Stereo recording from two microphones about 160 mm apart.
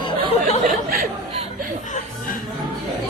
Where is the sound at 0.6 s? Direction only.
65° right (ahead or behind).